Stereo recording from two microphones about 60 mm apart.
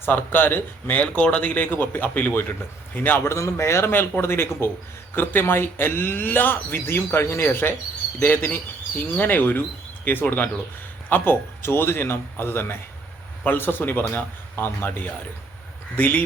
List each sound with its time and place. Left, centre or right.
0.0 s a man's voice: left
3.2 s a man's voice: left